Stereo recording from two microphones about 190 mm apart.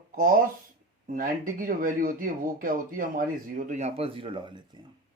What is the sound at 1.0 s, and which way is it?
Speech, 45° right (ahead or behind).